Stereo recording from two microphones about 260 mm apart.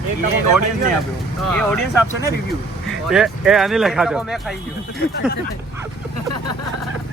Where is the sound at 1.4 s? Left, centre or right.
Centre.